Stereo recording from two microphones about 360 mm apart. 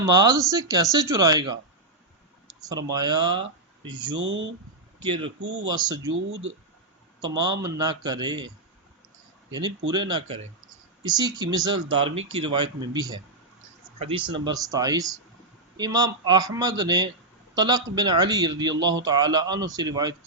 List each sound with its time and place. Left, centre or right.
0.0 s a man's voice: centre
2.6 s a man's voice: centre
4.2 s speech: right
5.7 s a man's voice: centre
6.1 s speech: right
7.6 s a man's voice: centre